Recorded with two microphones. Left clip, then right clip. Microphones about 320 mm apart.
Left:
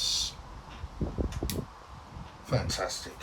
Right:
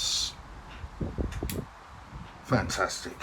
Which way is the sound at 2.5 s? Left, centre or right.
Centre.